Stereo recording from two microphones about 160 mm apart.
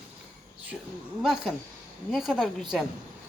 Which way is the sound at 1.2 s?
Centre (ahead or behind).